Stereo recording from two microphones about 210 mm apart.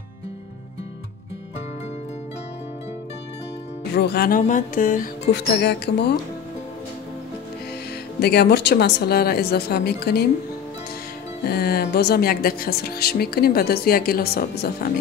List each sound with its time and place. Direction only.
3.9 s speech: 50° left (ahead or behind)
4.4 s mantra: 40° left (ahead or behind)
5.2 s speech: 55° left (ahead or behind)
8.2 s speech: 50° left (ahead or behind)
11.4 s speech: 50° left (ahead or behind)